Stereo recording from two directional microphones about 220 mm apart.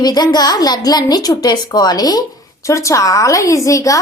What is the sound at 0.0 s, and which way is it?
A woman's voice, 20° left (ahead or behind).